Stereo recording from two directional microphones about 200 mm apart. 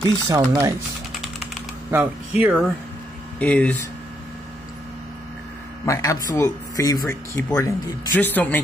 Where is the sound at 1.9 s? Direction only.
10° right (ahead or behind).